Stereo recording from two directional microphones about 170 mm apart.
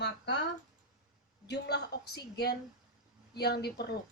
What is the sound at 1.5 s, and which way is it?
Speech, 75° left (ahead or behind).